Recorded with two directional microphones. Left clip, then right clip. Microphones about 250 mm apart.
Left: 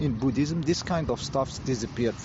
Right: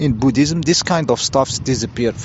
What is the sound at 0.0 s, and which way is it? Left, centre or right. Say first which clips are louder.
Speech: right 11 dB; right.